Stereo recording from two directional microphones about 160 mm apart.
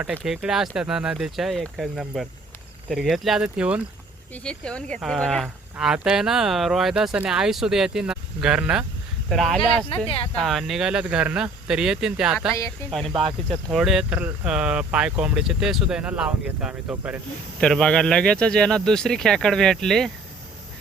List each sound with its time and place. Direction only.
0.0 s speech: 5° right (ahead or behind)
4.4 s speech: 5° left (ahead or behind)
9.9 s speech: 35° left (ahead or behind)
10.3 s speech: centre (ahead or behind)
12.5 s speech: 20° left (ahead or behind)
12.9 s speech: centre (ahead or behind)
17.6 s speech: 5° left (ahead or behind)